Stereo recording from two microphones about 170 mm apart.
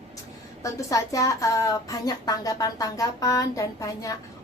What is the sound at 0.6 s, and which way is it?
A woman's voice, 20° left (ahead or behind).